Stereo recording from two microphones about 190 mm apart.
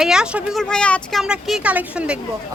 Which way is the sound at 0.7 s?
5° left (ahead or behind).